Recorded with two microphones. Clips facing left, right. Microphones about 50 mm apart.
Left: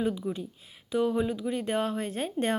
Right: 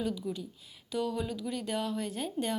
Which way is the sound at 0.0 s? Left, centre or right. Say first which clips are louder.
Left 4 dB; left.